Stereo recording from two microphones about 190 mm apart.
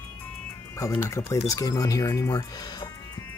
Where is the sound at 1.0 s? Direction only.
15° left (ahead or behind).